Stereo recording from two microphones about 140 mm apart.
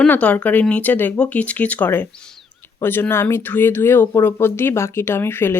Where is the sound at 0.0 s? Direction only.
10° left (ahead or behind).